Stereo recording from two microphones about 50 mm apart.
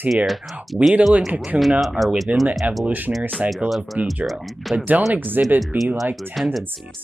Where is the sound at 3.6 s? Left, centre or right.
Right.